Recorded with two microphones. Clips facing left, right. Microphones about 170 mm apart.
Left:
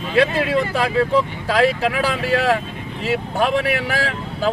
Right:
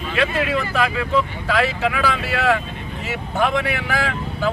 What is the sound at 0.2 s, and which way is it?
Speech, 35° left (ahead or behind).